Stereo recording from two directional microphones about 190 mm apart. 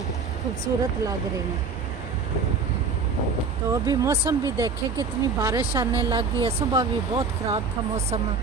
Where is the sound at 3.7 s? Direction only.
15° right (ahead or behind).